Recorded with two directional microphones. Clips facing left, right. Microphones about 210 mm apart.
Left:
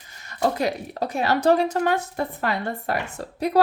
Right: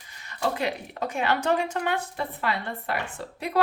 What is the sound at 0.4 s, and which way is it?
A woman's voice, 40° left (ahead or behind).